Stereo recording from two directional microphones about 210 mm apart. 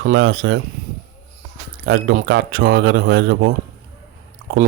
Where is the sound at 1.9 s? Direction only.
55° right (ahead or behind).